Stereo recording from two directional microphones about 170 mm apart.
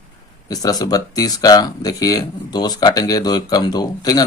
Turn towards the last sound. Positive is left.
turn(degrees=20)  # may be behind; listen again after turning